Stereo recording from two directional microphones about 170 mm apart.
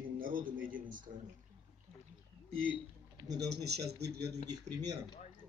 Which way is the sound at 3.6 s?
75° right (ahead or behind).